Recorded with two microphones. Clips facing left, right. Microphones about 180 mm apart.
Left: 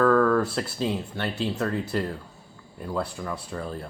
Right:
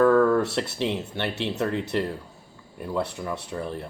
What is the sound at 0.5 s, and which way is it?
Speech, 25° right (ahead or behind).